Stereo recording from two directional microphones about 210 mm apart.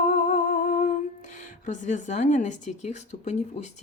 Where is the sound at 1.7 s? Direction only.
35° left (ahead or behind).